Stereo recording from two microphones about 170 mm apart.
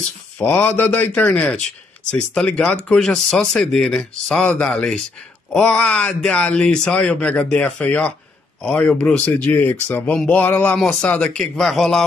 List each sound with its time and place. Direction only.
0.4 s speech: 10° left (ahead or behind)